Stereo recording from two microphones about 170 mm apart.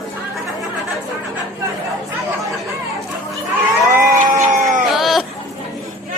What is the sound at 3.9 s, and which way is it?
Crowd, 50° right (ahead or behind).